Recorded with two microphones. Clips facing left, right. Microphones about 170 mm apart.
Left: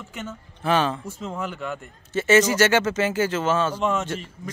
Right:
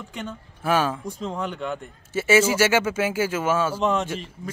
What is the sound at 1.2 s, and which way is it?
Speech, 5° left (ahead or behind).